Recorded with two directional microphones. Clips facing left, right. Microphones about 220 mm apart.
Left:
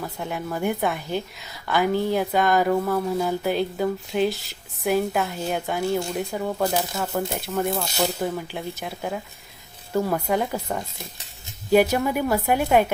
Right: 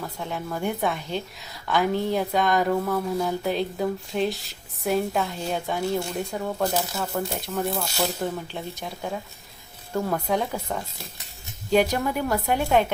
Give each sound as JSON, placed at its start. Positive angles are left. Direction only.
{"t": 0.0, "sound": "a woman's voice", "side_deg": 5}
{"t": 7.7, "sound": "speech", "side_deg": 20}
{"t": 8.2, "sound": "a woman's voice", "side_deg": 5}